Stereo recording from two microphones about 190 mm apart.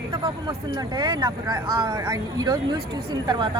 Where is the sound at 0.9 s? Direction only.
20° right (ahead or behind).